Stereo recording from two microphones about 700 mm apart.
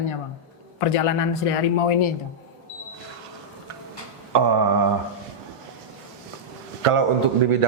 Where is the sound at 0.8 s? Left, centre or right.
Left.